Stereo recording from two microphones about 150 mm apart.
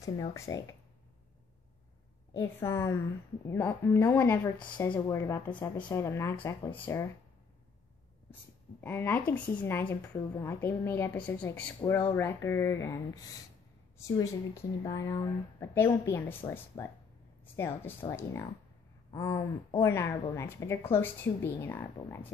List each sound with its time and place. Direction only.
0.0 s speech: 20° left (ahead or behind)
2.3 s a woman's voice: 20° left (ahead or behind)
4.6 s a woman's voice: 30° left (ahead or behind)
8.8 s a woman's voice: 15° left (ahead or behind)
11.8 s speech: 30° left (ahead or behind)
18.1 s a woman's voice: 20° left (ahead or behind)